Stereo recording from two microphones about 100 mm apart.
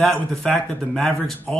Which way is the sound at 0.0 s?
5° left (ahead or behind).